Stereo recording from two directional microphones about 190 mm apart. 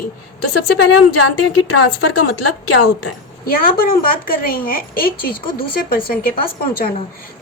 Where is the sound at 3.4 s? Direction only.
50° left (ahead or behind).